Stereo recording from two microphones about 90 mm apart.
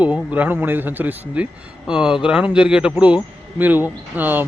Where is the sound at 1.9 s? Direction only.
10° right (ahead or behind).